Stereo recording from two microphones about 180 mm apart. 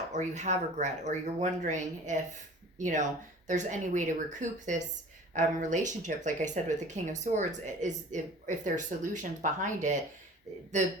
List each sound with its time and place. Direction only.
0.1 s speech: 40° right (ahead or behind)